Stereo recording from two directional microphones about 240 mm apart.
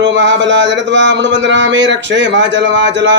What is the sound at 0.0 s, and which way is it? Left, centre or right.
Speech, right.